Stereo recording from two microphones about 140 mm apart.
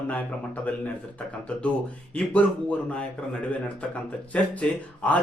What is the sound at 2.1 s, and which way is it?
Speech, 10° left (ahead or behind).